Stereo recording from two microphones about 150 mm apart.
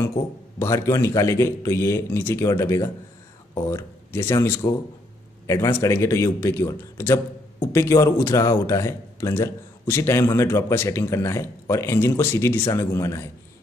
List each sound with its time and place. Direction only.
0.6 s a man's voice: 20° left (ahead or behind)